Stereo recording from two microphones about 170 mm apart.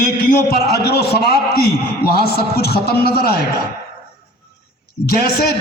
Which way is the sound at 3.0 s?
65° left (ahead or behind).